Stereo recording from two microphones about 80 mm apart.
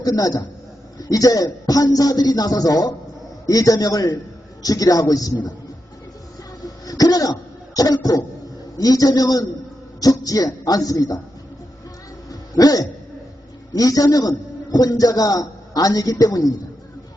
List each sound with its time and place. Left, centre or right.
0.0 s a man's voice: left
6.8 s throat clearing: left
7.8 s a man's voice: left
12.3 s a sound: left
13.7 s a man's voice: left